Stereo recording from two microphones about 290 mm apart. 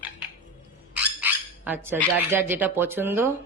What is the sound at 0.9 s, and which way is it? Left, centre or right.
Squawk, centre.